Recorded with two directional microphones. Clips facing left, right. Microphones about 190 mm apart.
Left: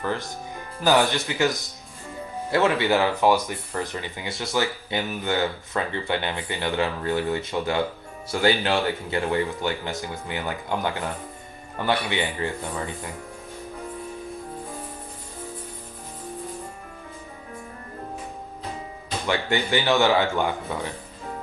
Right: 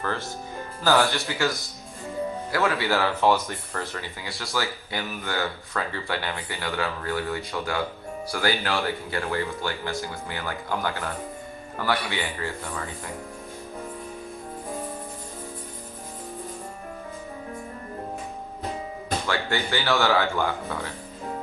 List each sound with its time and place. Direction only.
0.0 s speech: 15° left (ahead or behind)
19.3 s speech: 20° left (ahead or behind)